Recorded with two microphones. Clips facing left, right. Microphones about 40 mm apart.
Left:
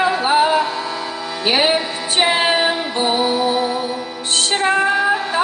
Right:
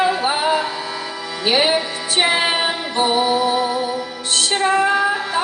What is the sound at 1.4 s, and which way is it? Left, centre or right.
Music, centre.